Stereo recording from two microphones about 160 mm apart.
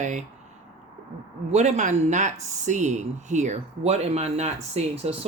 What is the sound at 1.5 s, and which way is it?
Speech, 45° right (ahead or behind).